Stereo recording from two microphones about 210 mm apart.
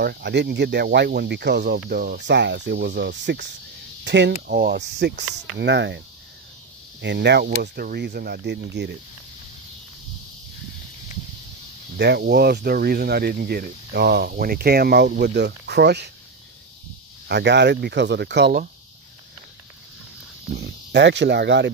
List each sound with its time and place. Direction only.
0.0 s speech: 50° right (ahead or behind)
12.0 s speech: 50° right (ahead or behind)
17.3 s speech: 55° right (ahead or behind)
20.5 s speech: 55° right (ahead or behind)